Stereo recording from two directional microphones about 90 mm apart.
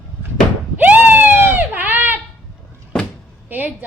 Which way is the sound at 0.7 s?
20° right (ahead or behind).